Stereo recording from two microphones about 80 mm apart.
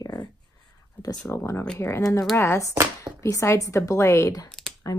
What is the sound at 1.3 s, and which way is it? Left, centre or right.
A woman's voice, left.